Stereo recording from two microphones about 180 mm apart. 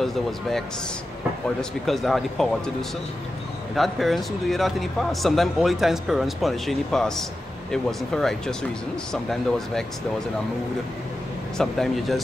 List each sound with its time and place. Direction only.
0.0 s speech: centre (ahead or behind)
3.7 s speech: centre (ahead or behind)
11.5 s speech: centre (ahead or behind)